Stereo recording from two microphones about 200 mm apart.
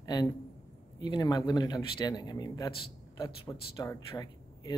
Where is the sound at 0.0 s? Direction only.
20° left (ahead or behind).